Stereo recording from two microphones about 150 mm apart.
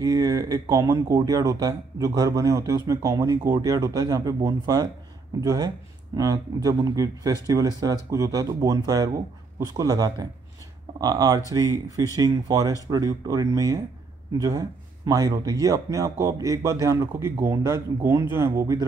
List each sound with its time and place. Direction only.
0.0 s speech: 25° right (ahead or behind)